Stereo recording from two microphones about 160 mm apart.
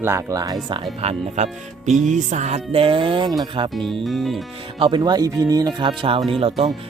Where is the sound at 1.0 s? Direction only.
40° right (ahead or behind).